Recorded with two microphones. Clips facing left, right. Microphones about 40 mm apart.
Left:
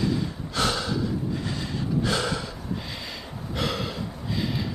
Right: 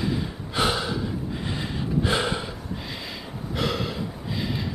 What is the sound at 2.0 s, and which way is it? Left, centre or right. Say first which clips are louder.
Gasp: right 3 dB; right.